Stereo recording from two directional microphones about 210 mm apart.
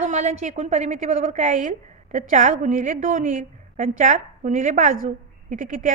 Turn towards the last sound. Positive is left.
turn(degrees=-40)  # may be behind; listen again after turning